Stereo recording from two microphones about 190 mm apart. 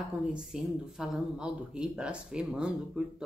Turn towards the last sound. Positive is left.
turn(degrees=-5)  # may be behind; listen again after turning